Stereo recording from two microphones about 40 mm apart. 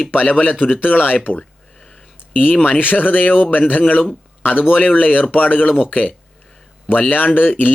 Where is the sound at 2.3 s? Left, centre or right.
Left.